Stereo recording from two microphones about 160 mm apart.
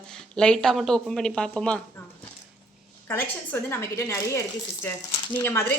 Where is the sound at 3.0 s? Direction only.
10° left (ahead or behind).